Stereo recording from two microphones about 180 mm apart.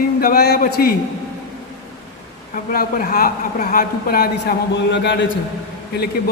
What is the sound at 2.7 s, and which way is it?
A man's voice, 55° left (ahead or behind).